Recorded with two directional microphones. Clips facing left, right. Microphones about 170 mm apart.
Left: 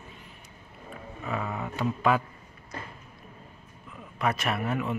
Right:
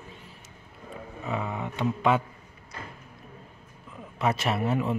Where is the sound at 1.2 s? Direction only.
20° right (ahead or behind).